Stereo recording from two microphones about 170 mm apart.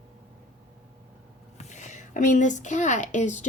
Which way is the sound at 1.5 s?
45° left (ahead or behind).